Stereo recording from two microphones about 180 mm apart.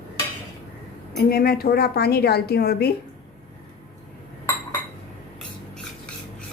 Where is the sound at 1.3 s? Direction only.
60° left (ahead or behind).